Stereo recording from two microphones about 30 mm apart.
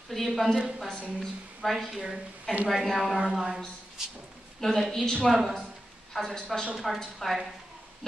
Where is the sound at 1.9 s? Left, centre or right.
Centre.